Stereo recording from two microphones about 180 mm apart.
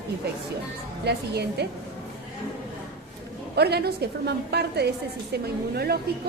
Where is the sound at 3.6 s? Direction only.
65° right (ahead or behind).